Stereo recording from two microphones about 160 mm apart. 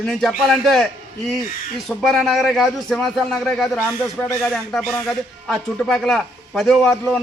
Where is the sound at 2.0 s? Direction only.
Centre (ahead or behind).